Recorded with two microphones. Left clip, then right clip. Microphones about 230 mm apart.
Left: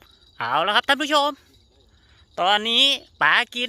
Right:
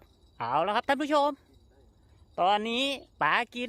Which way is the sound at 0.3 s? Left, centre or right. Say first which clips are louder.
Left 7 dB; centre.